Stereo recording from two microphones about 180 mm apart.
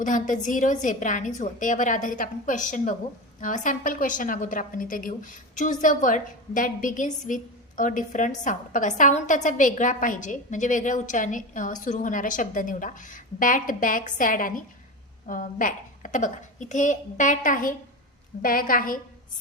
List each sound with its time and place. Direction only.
0.0 s a woman's voice: 45° left (ahead or behind)